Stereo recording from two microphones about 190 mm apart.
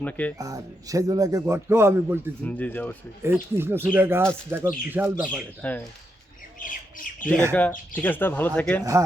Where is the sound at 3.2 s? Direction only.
10° right (ahead or behind).